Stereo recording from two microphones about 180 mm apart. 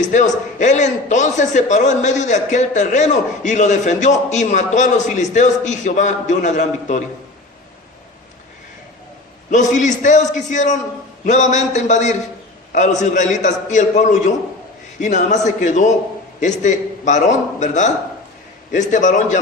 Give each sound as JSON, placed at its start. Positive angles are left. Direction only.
{"t": 0.1, "sound": "a man's voice", "side_deg": 40}
{"t": 9.5, "sound": "a man's voice", "side_deg": 40}